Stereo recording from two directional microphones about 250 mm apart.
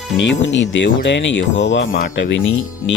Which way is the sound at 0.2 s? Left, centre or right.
Left.